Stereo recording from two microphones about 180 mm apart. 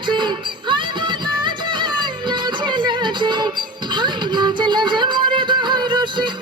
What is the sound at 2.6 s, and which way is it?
Music, 25° right (ahead or behind).